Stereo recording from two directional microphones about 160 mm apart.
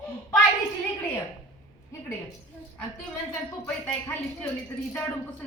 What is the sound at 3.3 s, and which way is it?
A woman's voice, 10° left (ahead or behind).